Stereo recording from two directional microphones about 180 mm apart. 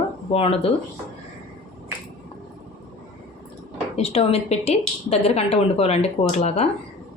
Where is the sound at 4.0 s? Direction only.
35° left (ahead or behind).